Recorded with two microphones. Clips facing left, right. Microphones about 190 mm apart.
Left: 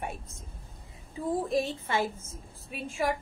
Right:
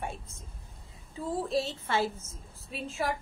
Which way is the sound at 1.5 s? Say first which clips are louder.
Left 1 dB; 15° left (ahead or behind).